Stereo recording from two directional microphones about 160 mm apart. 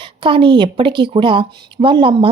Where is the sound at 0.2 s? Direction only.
30° right (ahead or behind).